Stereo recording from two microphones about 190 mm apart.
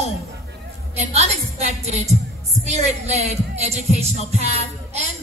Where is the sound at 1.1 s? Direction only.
35° right (ahead or behind).